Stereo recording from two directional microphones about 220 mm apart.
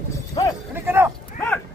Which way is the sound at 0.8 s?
10° right (ahead or behind).